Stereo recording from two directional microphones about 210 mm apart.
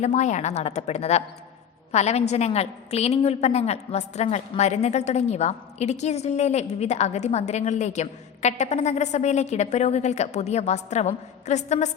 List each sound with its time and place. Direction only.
0.0 s a woman's voice: 35° left (ahead or behind)